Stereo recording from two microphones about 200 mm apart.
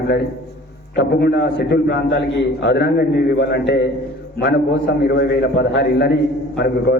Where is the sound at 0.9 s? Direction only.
55° left (ahead or behind).